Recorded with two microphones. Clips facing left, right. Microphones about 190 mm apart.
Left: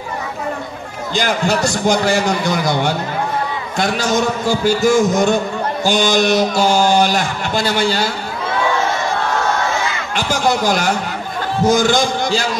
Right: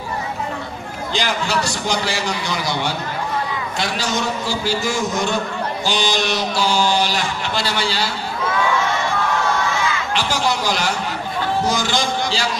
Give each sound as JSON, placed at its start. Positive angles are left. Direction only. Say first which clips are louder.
{"t": 1.1, "sound": "speech", "louder": "left 4 dB", "side_deg": 50}
{"t": 10.1, "sound": "a sound", "louder": "left 6 dB", "side_deg": 50}
{"t": 11.6, "sound": "speech", "louder": "left 7 dB", "side_deg": 50}